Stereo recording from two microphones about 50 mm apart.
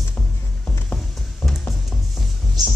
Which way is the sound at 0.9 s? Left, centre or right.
Centre.